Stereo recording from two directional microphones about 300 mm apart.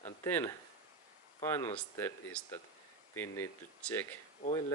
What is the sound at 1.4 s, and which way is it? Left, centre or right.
Speech, centre.